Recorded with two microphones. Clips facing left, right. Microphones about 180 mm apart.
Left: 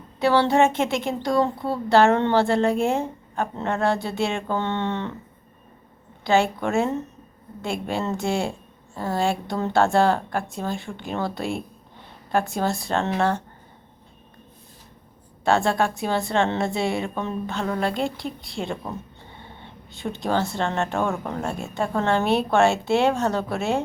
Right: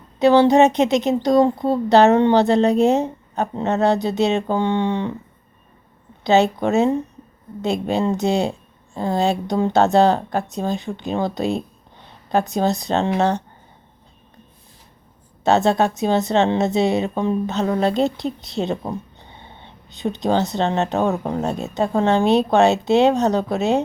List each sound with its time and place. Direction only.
0.2 s a woman's voice: 20° right (ahead or behind)
6.2 s a woman's voice: 20° right (ahead or behind)
15.4 s a woman's voice: 20° right (ahead or behind)